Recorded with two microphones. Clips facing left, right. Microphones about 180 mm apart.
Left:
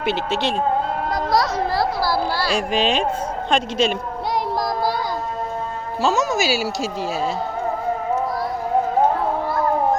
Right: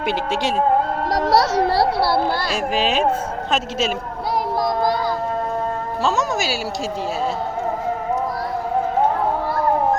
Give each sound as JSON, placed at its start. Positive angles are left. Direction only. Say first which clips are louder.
{"t": 0.0, "sound": "a woman's voice", "louder": "even", "side_deg": -10}
{"t": 1.1, "sound": "a child's voice", "louder": "right 4 dB", "side_deg": -75}
{"t": 2.0, "sound": "a child's voice", "louder": "right 3 dB", "side_deg": -60}
{"t": 2.5, "sound": "speech", "louder": "left 1 dB", "side_deg": -5}
{"t": 6.0, "sound": "speech", "louder": "left 2 dB", "side_deg": 0}